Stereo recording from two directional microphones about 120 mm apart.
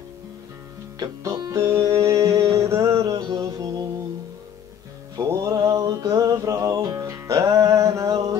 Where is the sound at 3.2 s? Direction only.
35° right (ahead or behind).